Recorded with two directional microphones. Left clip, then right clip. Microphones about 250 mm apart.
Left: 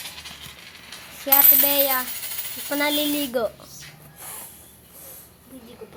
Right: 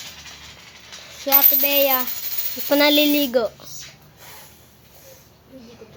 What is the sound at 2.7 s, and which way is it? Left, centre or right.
Speech, right.